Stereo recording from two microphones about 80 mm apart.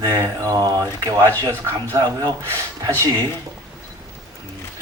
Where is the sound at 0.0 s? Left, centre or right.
Right.